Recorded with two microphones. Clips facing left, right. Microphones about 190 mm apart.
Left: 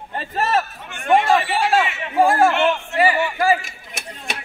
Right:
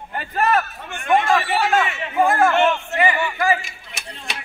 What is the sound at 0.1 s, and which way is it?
A man's voice, 25° left (ahead or behind).